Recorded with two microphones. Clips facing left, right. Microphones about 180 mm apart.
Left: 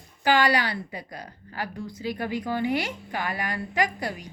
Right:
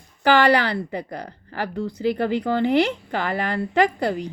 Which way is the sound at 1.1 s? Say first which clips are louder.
Right 7 dB; 65° right (ahead or behind).